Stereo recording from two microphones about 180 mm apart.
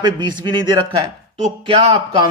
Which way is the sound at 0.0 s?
25° right (ahead or behind).